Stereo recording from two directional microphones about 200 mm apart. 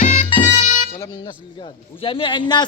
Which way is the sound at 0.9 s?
15° left (ahead or behind).